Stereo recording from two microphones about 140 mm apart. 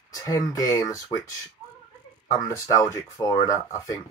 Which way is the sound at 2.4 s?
25° left (ahead or behind).